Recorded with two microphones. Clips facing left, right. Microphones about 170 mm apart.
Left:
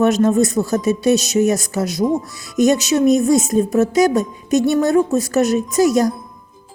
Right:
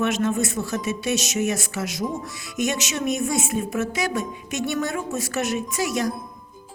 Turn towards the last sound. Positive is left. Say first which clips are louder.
# left 10 dB
turn(degrees=40)  # may be behind; listen again after turning